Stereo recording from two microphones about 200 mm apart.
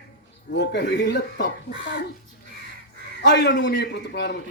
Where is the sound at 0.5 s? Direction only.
60° left (ahead or behind).